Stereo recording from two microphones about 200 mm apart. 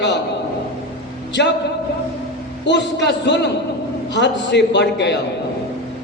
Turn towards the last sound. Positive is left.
turn(degrees=60)  # may be behind; listen again after turning